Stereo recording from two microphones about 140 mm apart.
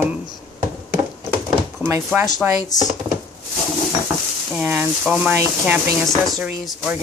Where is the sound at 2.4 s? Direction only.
10° right (ahead or behind).